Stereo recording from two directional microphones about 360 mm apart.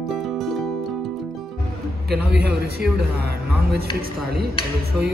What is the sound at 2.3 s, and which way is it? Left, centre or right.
A man's voice, right.